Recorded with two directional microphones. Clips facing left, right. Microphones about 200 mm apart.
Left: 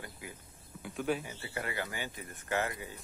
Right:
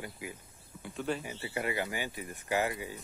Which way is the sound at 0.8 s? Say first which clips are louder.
Left 1 dB; 5° left (ahead or behind).